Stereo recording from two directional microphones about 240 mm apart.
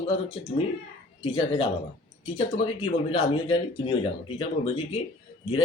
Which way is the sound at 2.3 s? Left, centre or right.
Left.